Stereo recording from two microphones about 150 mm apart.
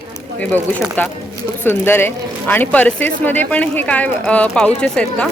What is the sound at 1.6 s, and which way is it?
Speech, 15° left (ahead or behind).